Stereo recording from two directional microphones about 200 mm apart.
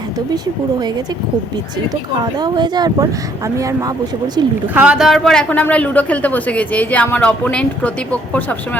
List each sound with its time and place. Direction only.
2.4 s a man's voice: 20° right (ahead or behind); by 8.5 s 5° left (ahead or behind)